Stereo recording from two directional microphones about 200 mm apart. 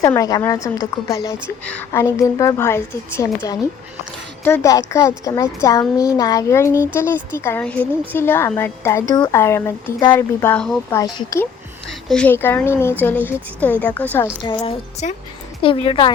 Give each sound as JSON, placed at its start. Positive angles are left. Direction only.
{"t": 0.0, "sound": "a woman's voice", "side_deg": 15}
{"t": 5.8, "sound": "speech", "side_deg": -5}
{"t": 6.1, "sound": "a woman's voice", "side_deg": 20}
{"t": 11.0, "sound": "a woman's voice", "side_deg": 20}
{"t": 12.0, "sound": "a woman's voice", "side_deg": 5}
{"t": 14.4, "sound": "speech", "side_deg": 30}